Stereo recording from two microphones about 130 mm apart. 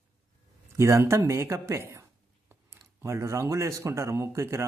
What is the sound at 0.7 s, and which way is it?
A man's voice, 20° right (ahead or behind).